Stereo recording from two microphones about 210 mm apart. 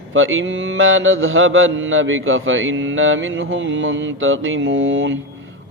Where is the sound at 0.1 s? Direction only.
70° right (ahead or behind).